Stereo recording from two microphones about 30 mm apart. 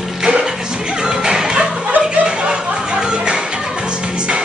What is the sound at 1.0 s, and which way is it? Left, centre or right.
Music, right.